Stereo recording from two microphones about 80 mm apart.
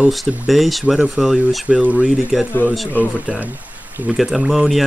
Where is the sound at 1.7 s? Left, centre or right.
Centre.